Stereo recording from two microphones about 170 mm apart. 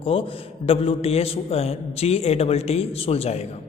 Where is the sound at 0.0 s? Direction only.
35° left (ahead or behind).